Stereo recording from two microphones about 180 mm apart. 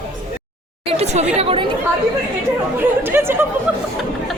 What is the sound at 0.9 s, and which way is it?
Speech, 35° right (ahead or behind).